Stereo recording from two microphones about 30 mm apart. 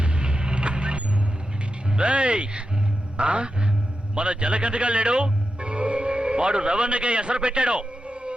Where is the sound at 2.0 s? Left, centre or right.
Right.